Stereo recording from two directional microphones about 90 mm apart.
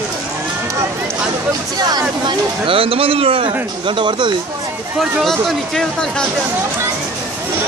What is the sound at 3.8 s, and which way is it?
Speech, 65° right (ahead or behind).